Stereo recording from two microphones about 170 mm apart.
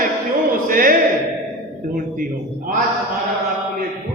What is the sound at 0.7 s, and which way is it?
Speech, 55° right (ahead or behind).